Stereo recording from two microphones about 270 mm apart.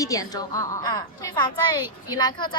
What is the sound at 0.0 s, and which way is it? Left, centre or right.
A woman's voice, centre.